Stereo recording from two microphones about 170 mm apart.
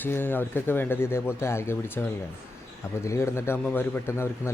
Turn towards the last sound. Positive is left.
turn(degrees=15)  # may be behind; listen again after turning